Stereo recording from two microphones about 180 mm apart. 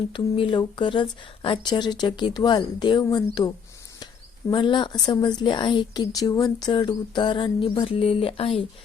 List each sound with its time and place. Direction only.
0.1 s speech: 30° left (ahead or behind)